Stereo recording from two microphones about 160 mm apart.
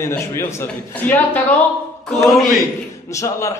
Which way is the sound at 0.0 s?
15° left (ahead or behind).